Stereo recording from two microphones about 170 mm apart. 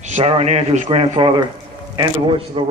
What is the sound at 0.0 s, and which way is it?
A man's voice, 40° right (ahead or behind).